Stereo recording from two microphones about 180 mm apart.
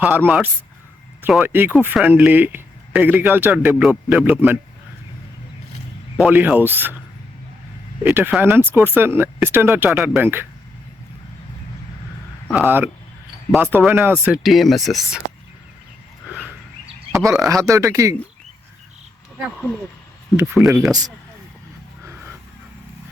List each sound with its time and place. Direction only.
0.0 s speech: 10° right (ahead or behind)
6.1 s speech: 10° right (ahead or behind)
8.0 s speech: 10° right (ahead or behind)
12.5 s speech: 10° right (ahead or behind)
14.4 s speech: centre (ahead or behind)
16.3 s wild animals: 10° right (ahead or behind)
17.2 s speech: 15° right (ahead or behind)
20.3 s speech: 10° right (ahead or behind)